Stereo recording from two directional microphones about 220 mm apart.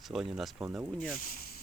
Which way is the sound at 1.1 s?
40° left (ahead or behind).